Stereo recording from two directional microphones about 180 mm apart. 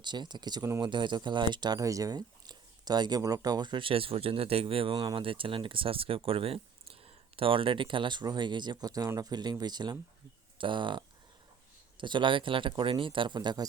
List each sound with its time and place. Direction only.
0.0 s speech: 25° right (ahead or behind)